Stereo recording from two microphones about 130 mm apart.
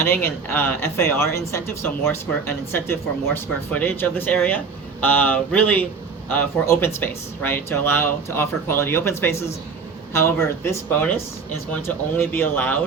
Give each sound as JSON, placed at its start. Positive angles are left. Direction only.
{"t": 0.0, "sound": "speech", "side_deg": 15}